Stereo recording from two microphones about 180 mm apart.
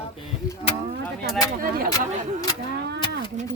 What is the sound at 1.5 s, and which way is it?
Speech, 55° right (ahead or behind).